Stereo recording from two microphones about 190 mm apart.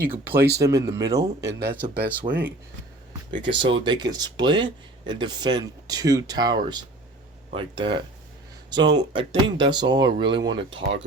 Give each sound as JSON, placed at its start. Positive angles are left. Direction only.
{"t": 0.0, "sound": "speech", "side_deg": -10}
{"t": 2.3, "sound": "speech", "side_deg": -30}